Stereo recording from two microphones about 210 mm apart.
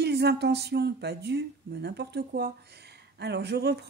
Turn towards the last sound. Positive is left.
turn(degrees=-50)  # may be behind; listen again after turning